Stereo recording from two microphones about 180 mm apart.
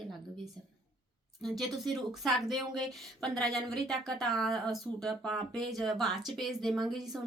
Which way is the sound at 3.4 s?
Centre (ahead or behind).